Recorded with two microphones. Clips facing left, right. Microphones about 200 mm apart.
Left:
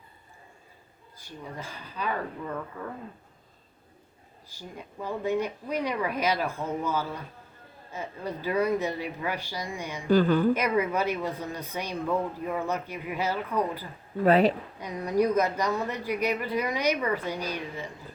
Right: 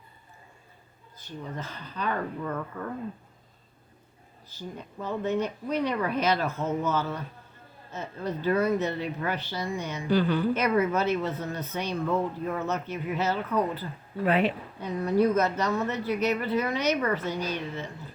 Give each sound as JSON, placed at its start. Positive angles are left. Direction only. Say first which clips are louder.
{"t": 1.2, "sound": "speech", "louder": "right 2 dB", "side_deg": 10}
{"t": 4.4, "sound": "speech", "louder": "right 3 dB", "side_deg": 10}
{"t": 10.1, "sound": "a woman's voice", "louder": "left 3 dB", "side_deg": 45}
{"t": 10.5, "sound": "speech", "louder": "right 1 dB", "side_deg": 10}
{"t": 14.3, "sound": "speech", "louder": "left 4 dB", "side_deg": 40}
{"t": 14.8, "sound": "speech", "louder": "right 3 dB", "side_deg": 15}